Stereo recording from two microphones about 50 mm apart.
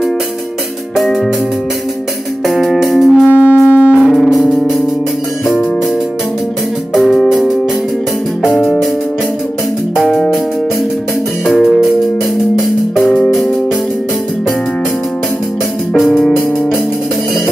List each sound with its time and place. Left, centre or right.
0.9 s music: centre
2.4 s music: centre
3.3 s music: right
4.0 s music: centre
7.0 s music: centre
7.2 s music: centre
10.1 s music: centre
11.4 s music: centre